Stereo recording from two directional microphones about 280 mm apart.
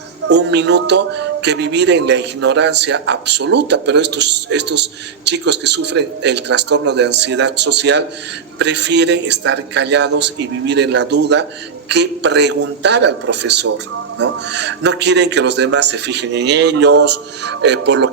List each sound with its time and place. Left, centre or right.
0.3 s speech: right